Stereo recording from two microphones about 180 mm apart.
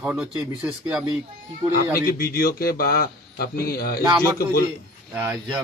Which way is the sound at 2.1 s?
55° left (ahead or behind).